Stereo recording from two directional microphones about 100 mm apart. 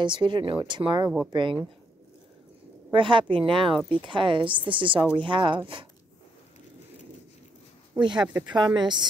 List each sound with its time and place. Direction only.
0.0 s a woman's voice: 50° right (ahead or behind)
2.9 s a woman's voice: 55° right (ahead or behind)
7.9 s speech: 50° right (ahead or behind)
8.3 s speech: 15° right (ahead or behind)
8.5 s speech: 50° right (ahead or behind)